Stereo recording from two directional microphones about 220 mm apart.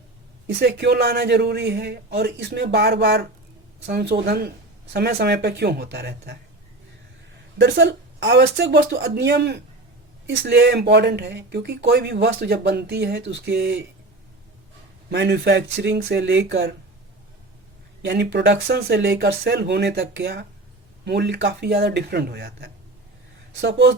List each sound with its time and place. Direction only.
0.4 s speech: 50° right (ahead or behind)
7.6 s speech: 50° right (ahead or behind)
15.1 s speech: 50° right (ahead or behind)
18.0 s speech: 50° right (ahead or behind)